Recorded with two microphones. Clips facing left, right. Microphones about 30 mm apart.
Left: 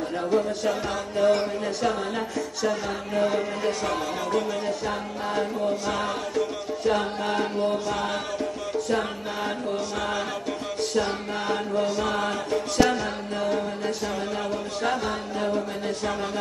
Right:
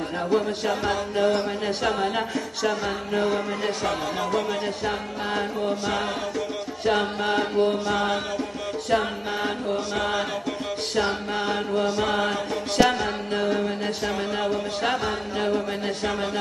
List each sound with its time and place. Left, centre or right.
0.3 s music: right
1.8 s a sound: right
3.3 s music: centre
9.8 s music: right
11.0 s a sound: right
11.4 s music: right